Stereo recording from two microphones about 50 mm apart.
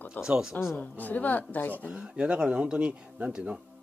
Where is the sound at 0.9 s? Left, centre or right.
Left.